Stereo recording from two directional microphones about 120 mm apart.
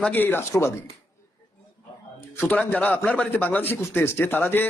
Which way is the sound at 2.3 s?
20° left (ahead or behind).